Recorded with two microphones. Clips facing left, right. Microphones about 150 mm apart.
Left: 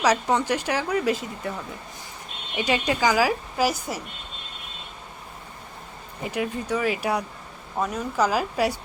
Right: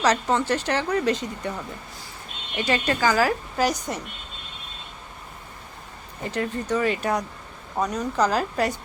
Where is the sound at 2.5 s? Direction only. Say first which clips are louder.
Even; 15° left (ahead or behind).